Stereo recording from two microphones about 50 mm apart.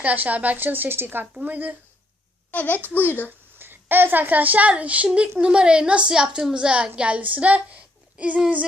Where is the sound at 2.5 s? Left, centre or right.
Left.